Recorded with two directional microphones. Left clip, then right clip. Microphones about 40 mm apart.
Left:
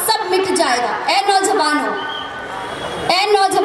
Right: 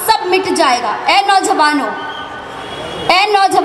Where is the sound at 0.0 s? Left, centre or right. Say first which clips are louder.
Right 4 dB; right.